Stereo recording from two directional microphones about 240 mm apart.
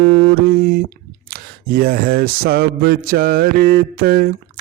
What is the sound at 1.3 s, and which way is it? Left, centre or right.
Mantra, right.